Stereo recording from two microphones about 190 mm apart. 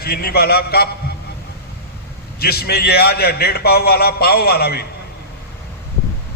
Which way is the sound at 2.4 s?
55° left (ahead or behind).